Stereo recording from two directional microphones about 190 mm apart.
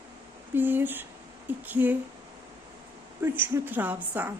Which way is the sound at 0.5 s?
10° right (ahead or behind).